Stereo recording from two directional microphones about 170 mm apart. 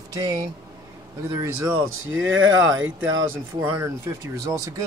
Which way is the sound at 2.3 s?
90° right.